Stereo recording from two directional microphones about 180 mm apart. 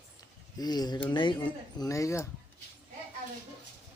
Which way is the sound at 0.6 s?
20° left (ahead or behind).